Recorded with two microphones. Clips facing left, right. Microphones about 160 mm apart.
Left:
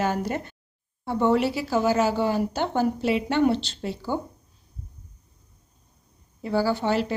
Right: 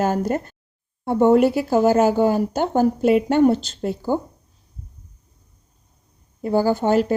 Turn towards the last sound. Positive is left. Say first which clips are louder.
# right 6 dB
turn(degrees=-45)  # may be behind; listen again after turning